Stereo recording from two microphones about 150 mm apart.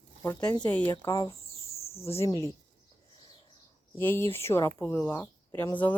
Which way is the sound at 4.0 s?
15° left (ahead or behind).